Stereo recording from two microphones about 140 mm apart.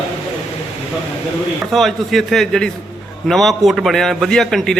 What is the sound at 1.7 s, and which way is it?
A man's voice, centre (ahead or behind).